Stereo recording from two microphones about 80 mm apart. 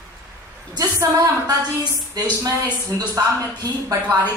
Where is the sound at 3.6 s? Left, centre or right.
Right.